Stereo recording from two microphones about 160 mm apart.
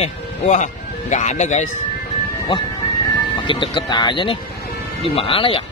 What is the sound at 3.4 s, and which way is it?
Speech, 30° left (ahead or behind).